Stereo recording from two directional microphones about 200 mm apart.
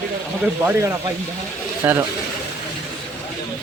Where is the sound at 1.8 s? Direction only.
10° right (ahead or behind).